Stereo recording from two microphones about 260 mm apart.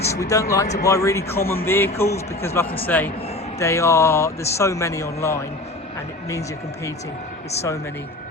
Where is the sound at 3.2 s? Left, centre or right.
Left.